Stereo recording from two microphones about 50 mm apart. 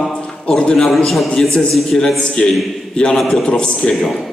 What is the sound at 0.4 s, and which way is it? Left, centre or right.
Speech, centre.